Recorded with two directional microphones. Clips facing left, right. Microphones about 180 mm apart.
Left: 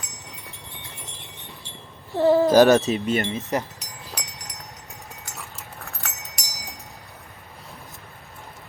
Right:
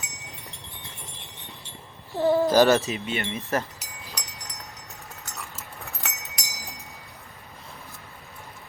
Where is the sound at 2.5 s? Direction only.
15° left (ahead or behind).